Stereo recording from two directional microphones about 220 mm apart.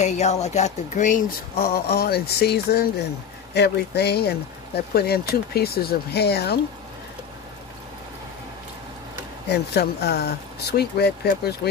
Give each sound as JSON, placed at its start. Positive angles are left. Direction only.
{"t": 0.0, "sound": "speech", "side_deg": 30}
{"t": 9.5, "sound": "speech", "side_deg": 50}